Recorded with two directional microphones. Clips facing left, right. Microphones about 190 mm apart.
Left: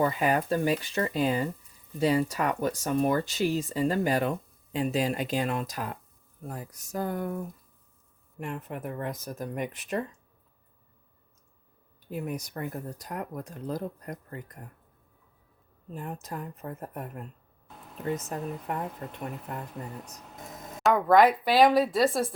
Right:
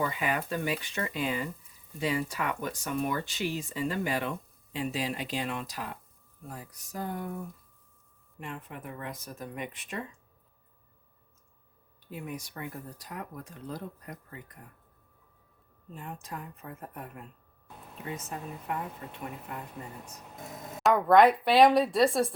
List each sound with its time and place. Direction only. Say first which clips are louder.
0.0 s speech: left 6 dB; 40° left (ahead or behind)
12.1 s speech: left 5 dB; 45° left (ahead or behind)
16.2 s speech: left 5 dB; 40° left (ahead or behind)
18.7 s speech: left 2 dB; 40° left (ahead or behind)
20.8 s speech: even; centre (ahead or behind)